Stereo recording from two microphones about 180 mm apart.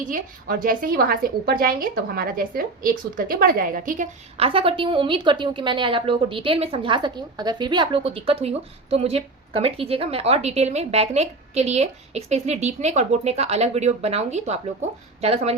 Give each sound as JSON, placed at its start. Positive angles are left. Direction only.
{"t": 0.0, "sound": "a woman's voice", "side_deg": -50}
{"t": 4.4, "sound": "a woman's voice", "side_deg": -30}